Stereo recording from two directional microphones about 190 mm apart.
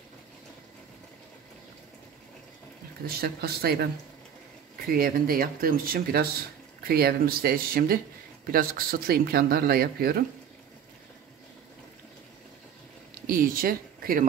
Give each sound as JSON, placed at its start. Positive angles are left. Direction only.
{"t": 3.1, "sound": "speech", "side_deg": -55}
{"t": 13.3, "sound": "speech", "side_deg": -50}